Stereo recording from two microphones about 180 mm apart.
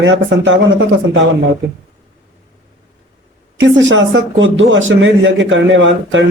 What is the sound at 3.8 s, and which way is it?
A man's voice, 90° right.